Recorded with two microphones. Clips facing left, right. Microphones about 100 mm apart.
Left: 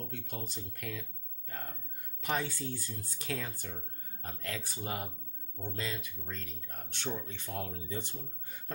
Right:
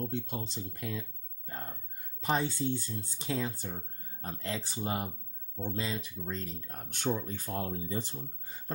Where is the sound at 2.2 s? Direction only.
30° right (ahead or behind).